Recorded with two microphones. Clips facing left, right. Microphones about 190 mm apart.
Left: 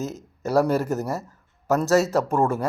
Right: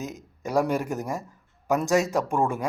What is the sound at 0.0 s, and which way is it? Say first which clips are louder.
A man's voice: left 4 dB; 10° right (ahead or behind).